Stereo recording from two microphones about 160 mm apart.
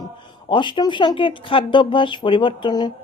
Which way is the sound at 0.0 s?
30° left (ahead or behind).